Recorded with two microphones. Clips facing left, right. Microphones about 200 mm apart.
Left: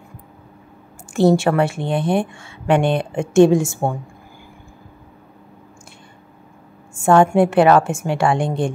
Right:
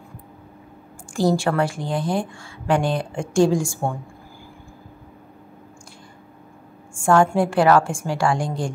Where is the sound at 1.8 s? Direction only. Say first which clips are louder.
Left 4 dB; 60° left (ahead or behind).